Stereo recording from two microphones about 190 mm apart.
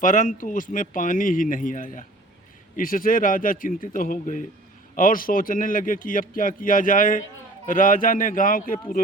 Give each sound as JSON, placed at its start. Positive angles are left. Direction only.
{"t": 0.0, "sound": "a man's voice", "side_deg": 45}